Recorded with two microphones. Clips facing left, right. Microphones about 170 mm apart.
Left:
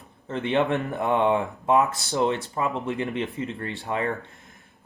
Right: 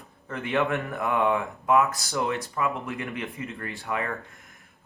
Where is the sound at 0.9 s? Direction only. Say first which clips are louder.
Left 3 dB; 35° left (ahead or behind).